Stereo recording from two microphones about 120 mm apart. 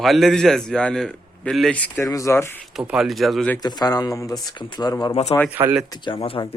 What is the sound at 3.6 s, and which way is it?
Speech, 35° left (ahead or behind).